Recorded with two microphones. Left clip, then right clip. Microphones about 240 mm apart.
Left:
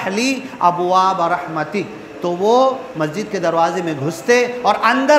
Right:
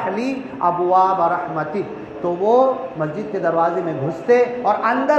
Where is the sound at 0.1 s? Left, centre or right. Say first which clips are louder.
Left 4 dB; left.